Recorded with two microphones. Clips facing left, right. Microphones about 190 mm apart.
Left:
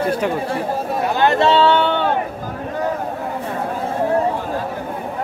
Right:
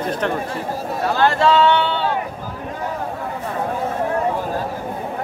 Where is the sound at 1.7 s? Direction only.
55° left (ahead or behind).